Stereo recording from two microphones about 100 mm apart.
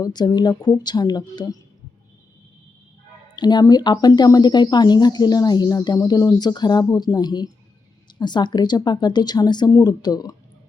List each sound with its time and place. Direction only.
0.0 s speech: 40° left (ahead or behind)
3.3 s speech: 45° left (ahead or behind)